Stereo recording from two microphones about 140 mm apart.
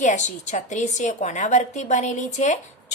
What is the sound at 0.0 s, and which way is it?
A woman's voice, 55° left (ahead or behind).